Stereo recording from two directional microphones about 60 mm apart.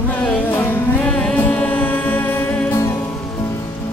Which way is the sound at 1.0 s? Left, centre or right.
Centre.